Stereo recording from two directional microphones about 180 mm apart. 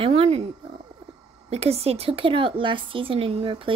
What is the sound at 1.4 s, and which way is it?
A woman's voice, 35° right (ahead or behind).